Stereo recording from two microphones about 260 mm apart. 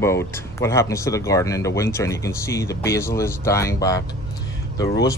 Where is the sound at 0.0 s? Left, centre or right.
Centre.